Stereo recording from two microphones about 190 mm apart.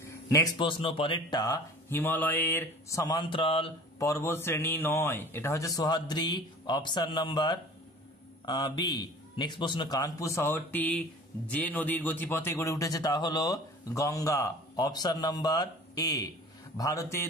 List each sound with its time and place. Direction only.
0.3 s speech: 20° left (ahead or behind)
4.0 s a man's voice: 15° left (ahead or behind)